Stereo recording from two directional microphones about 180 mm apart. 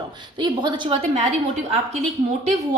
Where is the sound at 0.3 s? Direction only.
25° right (ahead or behind).